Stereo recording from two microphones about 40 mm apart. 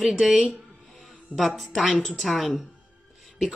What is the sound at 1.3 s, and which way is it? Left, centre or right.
Speech, centre.